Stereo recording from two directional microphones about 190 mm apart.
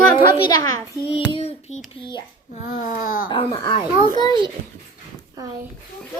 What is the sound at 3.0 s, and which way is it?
Speech, 45° left (ahead or behind).